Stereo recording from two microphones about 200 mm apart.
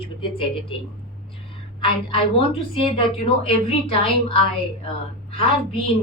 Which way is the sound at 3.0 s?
25° left (ahead or behind).